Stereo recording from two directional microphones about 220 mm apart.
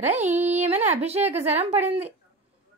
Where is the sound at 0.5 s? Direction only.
30° right (ahead or behind).